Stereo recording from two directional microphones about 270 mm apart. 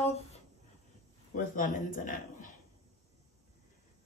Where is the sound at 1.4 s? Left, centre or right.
Left.